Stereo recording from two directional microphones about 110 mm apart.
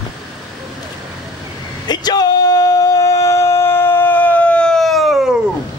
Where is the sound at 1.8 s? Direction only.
40° left (ahead or behind); by 5.3 s 5° right (ahead or behind).